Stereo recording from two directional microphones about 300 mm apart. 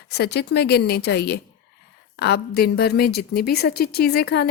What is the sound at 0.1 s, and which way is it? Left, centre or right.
Speech, left.